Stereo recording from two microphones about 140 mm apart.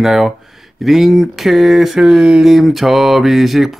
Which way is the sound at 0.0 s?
Centre (ahead or behind).